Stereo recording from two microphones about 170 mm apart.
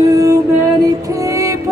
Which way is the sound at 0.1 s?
20° right (ahead or behind).